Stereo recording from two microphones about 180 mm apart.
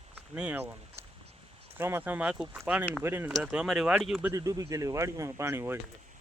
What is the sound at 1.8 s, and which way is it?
Speech, 10° right (ahead or behind).